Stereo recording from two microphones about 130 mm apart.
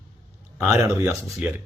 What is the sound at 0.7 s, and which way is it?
Speech, 20° right (ahead or behind).